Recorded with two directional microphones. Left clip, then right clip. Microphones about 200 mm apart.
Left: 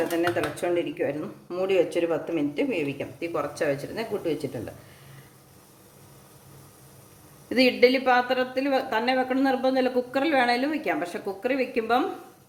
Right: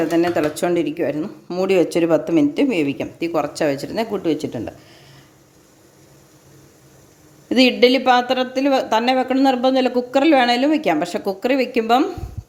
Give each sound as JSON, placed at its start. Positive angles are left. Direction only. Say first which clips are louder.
{"t": 0.2, "sound": "speech", "louder": "right 7 dB", "side_deg": -55}
{"t": 1.6, "sound": "speech", "louder": "right 6 dB", "side_deg": -60}
{"t": 7.5, "sound": "a woman's voice", "louder": "right 6 dB", "side_deg": -40}